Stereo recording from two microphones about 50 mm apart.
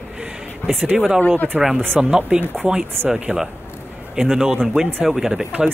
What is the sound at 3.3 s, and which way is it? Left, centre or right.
Speech, right.